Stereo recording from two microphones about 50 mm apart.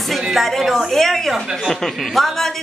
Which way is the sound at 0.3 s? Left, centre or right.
Centre.